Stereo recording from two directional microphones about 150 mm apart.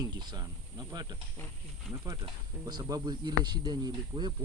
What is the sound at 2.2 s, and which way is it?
Speech, 30° right (ahead or behind).